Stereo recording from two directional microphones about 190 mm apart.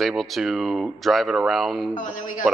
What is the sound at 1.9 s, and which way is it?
Speech, 45° left (ahead or behind).